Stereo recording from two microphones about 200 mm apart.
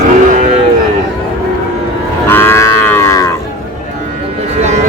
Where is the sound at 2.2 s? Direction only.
10° left (ahead or behind).